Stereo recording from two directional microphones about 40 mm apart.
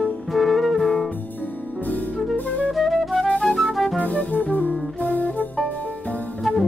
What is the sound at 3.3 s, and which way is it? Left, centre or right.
Music, left.